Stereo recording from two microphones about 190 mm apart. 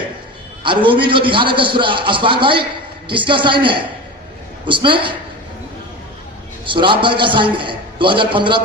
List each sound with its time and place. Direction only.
0.6 s a man's voice: 25° right (ahead or behind)
6.7 s a man's voice: 25° right (ahead or behind)